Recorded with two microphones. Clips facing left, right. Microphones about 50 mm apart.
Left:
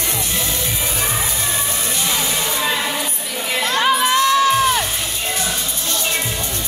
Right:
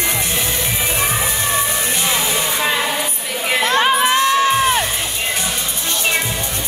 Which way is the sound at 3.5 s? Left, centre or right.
Right.